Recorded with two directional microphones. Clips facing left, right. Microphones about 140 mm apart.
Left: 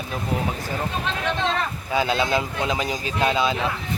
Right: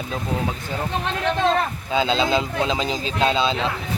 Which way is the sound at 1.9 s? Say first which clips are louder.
Right 1 dB; 20° right (ahead or behind).